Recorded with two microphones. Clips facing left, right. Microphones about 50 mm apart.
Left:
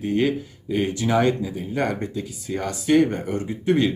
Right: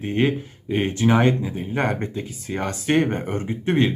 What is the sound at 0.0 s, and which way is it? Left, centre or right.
Speech, right.